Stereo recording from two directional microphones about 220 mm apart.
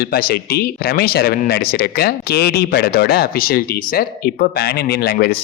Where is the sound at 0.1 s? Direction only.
45° left (ahead or behind).